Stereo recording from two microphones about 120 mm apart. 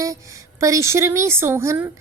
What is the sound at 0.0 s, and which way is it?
A woman's voice, 30° right (ahead or behind).